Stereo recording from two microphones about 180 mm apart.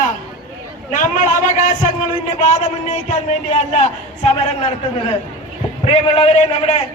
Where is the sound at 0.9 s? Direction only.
45° left (ahead or behind).